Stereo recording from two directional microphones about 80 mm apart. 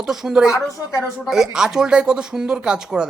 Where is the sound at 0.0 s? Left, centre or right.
Centre.